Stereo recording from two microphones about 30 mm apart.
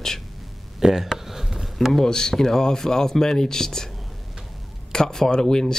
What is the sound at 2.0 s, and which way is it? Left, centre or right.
Speech, left.